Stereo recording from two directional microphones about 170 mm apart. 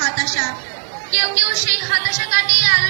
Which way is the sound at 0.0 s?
55° left (ahead or behind).